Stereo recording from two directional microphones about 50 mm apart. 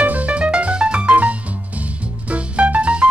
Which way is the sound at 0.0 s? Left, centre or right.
Right.